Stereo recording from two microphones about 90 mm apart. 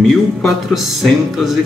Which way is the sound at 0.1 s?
5° left (ahead or behind).